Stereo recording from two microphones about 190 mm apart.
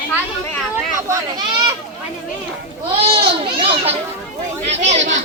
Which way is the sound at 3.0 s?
30° right (ahead or behind).